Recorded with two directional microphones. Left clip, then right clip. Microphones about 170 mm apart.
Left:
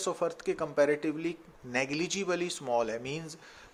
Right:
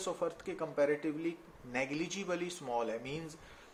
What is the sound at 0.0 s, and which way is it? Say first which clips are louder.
Speech: left 6 dB; 40° left (ahead or behind).